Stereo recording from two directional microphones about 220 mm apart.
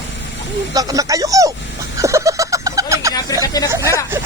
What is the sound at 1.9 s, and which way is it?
Snicker, 15° right (ahead or behind).